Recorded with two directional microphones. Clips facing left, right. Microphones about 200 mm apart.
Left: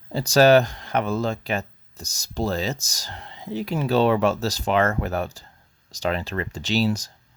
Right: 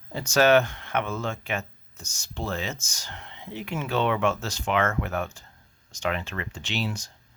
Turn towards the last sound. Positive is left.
turn(degrees=40)  # may be behind; listen again after turning